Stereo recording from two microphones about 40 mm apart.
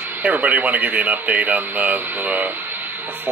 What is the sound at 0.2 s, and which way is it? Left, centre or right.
Speech, right.